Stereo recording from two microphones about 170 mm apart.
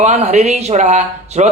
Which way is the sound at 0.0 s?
40° right (ahead or behind).